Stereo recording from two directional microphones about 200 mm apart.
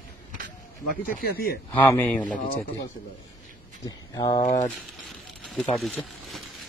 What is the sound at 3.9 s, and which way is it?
Speech, 20° left (ahead or behind).